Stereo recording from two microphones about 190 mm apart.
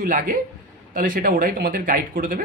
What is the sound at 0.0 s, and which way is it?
Speech, 45° right (ahead or behind).